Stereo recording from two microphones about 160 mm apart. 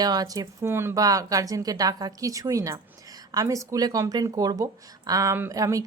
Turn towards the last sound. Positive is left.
turn(degrees=-20)  # may be behind; listen again after turning